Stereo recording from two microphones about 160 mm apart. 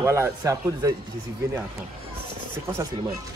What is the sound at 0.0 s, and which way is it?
Speech, 15° right (ahead or behind).